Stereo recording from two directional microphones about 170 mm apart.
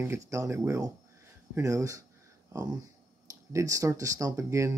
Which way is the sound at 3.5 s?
20° right (ahead or behind).